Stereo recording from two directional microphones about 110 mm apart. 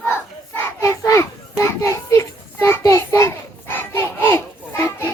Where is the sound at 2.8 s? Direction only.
30° left (ahead or behind).